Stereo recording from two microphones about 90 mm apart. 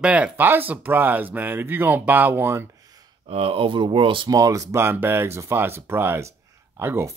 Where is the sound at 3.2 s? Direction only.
90° right; by 4.2 s 75° right (ahead or behind).